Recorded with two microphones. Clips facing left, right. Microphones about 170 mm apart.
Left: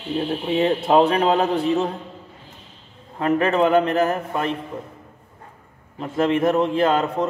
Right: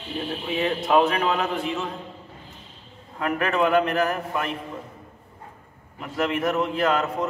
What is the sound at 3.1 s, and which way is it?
A man's voice, 25° left (ahead or behind).